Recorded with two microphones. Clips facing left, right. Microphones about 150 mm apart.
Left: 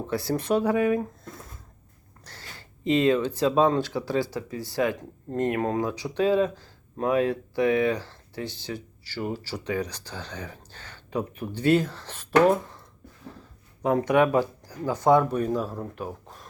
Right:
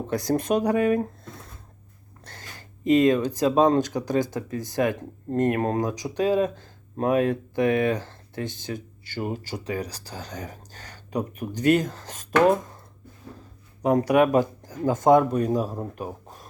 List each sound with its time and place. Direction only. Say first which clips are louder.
0.1 s speech: right 2 dB; 45° right (ahead or behind)
2.2 s a sound: right 2 dB; 50° right (ahead or behind)
3.6 s speech: right 3 dB; 45° right (ahead or behind)
9.1 s speech: right 1 dB; 20° right (ahead or behind)
9.4 s speech: left 1 dB; 40° right (ahead or behind)
13.8 s speech: right 2 dB; 35° right (ahead or behind)
14.3 s speech: right 2 dB; 50° right (ahead or behind)
15.3 s speech: right 2 dB; 20° right (ahead or behind)